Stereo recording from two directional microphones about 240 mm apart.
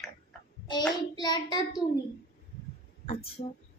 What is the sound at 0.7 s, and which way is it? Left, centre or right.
Child singing, centre.